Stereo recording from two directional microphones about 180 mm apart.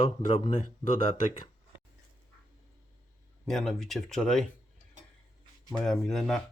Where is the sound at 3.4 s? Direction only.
Centre (ahead or behind).